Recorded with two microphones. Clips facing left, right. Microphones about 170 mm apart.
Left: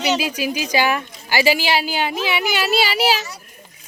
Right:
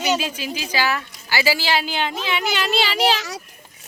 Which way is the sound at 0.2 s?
10° left (ahead or behind).